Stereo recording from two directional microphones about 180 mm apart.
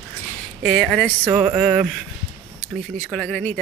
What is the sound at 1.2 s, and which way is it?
Speech, 25° right (ahead or behind).